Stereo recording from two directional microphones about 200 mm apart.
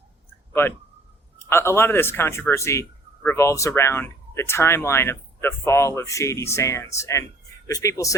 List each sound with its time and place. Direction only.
1.5 s speech: 10° left (ahead or behind)